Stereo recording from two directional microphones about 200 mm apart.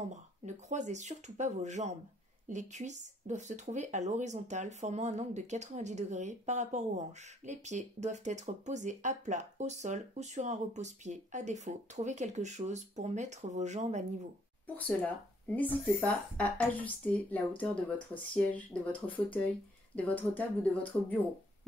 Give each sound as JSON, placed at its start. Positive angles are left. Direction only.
{"t": 0.0, "sound": "speech", "side_deg": -35}
{"t": 14.8, "sound": "speech", "side_deg": 10}